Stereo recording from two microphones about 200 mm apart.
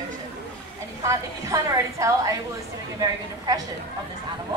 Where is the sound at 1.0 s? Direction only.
15° right (ahead or behind).